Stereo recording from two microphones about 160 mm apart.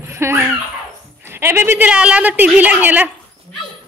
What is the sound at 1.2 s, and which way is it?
A woman's voice, 15° right (ahead or behind).